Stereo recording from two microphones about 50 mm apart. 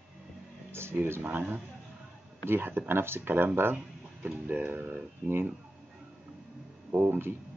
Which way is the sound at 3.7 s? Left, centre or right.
Right.